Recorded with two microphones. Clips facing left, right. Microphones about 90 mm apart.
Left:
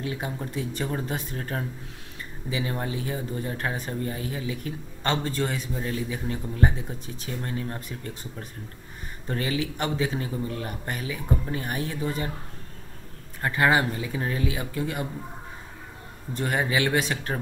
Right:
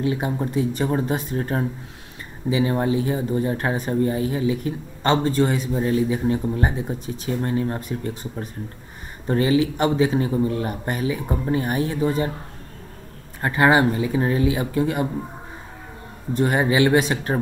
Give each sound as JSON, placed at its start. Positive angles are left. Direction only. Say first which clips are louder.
{"t": 0.0, "sound": "speech", "louder": "right 8 dB", "side_deg": -25}
{"t": 2.4, "sound": "speech", "louder": "right 9 dB", "side_deg": -65}
{"t": 2.9, "sound": "a man's voice", "louder": "right 9 dB", "side_deg": -30}
{"t": 3.7, "sound": "speech", "louder": "right 9 dB", "side_deg": -20}
{"t": 4.1, "sound": "a man's voice", "louder": "right 9 dB", "side_deg": -30}
{"t": 9.3, "sound": "speech", "louder": "right 9 dB", "side_deg": -25}
{"t": 13.4, "sound": "a man's voice", "louder": "right 5 dB", "side_deg": -35}
{"t": 16.3, "sound": "speech", "louder": "right 7 dB", "side_deg": -25}